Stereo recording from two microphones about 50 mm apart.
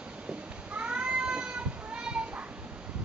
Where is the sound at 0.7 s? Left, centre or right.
Right.